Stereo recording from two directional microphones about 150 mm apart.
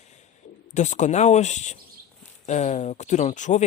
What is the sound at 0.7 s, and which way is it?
Speech, 55° left (ahead or behind).